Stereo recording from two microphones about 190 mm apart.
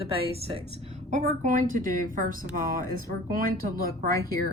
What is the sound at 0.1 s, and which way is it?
Speech, 30° right (ahead or behind).